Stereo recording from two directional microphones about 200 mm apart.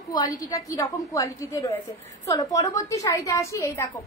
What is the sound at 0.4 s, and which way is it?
A woman's voice, 20° left (ahead or behind).